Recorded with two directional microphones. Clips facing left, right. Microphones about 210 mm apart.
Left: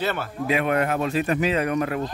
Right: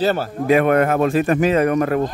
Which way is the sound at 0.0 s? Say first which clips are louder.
Right 7 dB; 35° right (ahead or behind).